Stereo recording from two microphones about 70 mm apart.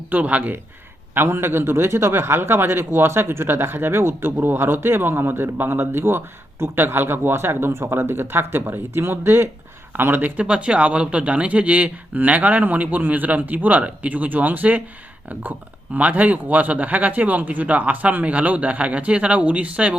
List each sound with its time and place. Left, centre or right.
0.1 s speech: right
1.1 s a man's voice: right
10.4 s speech: centre